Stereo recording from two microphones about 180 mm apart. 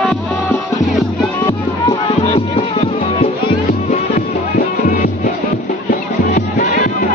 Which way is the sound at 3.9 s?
45° left (ahead or behind).